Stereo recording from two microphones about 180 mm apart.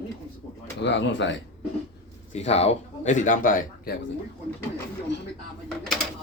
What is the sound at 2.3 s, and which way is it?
A man's voice, 35° left (ahead or behind).